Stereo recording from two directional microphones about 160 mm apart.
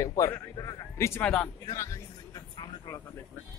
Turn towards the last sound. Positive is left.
turn(degrees=20)  # may be behind; listen again after turning